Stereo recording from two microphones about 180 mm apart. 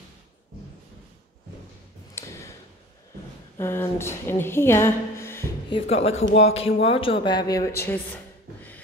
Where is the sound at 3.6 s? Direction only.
15° left (ahead or behind).